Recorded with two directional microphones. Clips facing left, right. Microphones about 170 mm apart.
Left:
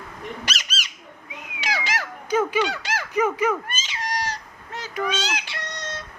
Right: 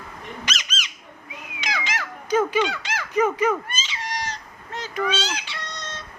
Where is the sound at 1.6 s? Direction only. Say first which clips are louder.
Left 2 dB; 35° left (ahead or behind).